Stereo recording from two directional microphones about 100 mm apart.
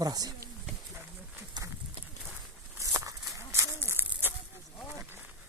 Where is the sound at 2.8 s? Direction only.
30° right (ahead or behind).